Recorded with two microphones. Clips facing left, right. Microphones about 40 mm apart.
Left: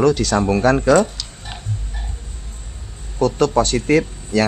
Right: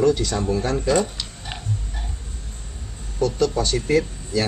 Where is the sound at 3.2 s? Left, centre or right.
Left.